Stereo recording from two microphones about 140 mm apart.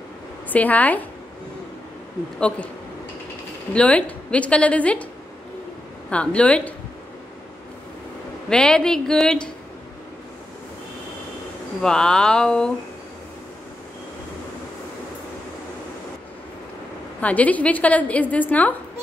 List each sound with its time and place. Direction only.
0.5 s a woman's voice: 10° left (ahead or behind)
3.7 s a woman's voice: 10° left (ahead or behind)
6.0 s a woman's voice: 10° left (ahead or behind)
8.5 s a woman's voice: 5° left (ahead or behind)
11.8 s a woman's voice: 5° left (ahead or behind)
17.2 s a woman's voice: 10° left (ahead or behind)